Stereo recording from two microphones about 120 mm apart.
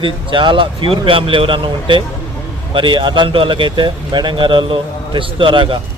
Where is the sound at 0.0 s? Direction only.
45° right (ahead or behind).